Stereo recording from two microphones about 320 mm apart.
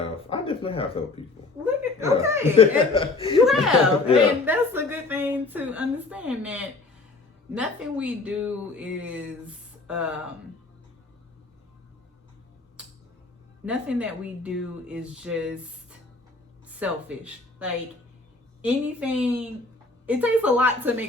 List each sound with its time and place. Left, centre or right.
0.3 s speech: centre
1.6 s speech: centre
2.9 s speech: centre
3.4 s a woman's voice: centre
13.7 s a woman's voice: centre